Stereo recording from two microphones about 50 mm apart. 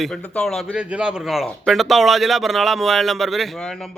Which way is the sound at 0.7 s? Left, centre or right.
Centre.